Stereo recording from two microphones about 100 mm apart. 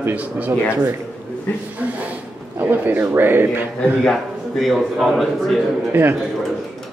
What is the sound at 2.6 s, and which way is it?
A man's voice, 20° right (ahead or behind).